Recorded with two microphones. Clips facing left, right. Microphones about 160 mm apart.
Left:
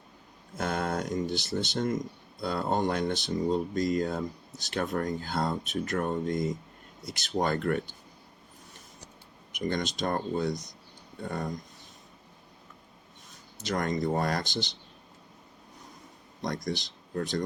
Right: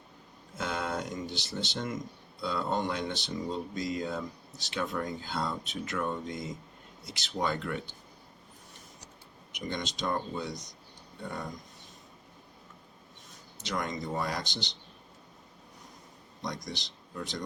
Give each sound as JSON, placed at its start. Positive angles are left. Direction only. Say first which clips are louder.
{"t": 0.5, "sound": "speech", "louder": "left 3 dB", "side_deg": 50}
{"t": 9.5, "sound": "speech", "louder": "left 6 dB", "side_deg": 50}
{"t": 13.6, "sound": "speech", "louder": "left 5 dB", "side_deg": 50}
{"t": 16.6, "sound": "speech", "louder": "left 8 dB", "side_deg": 50}